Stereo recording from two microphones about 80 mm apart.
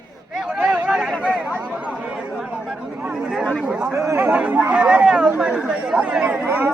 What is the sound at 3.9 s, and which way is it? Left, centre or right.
Speech, right.